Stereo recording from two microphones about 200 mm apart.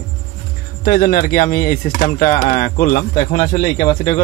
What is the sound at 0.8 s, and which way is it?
Speech, 45° left (ahead or behind).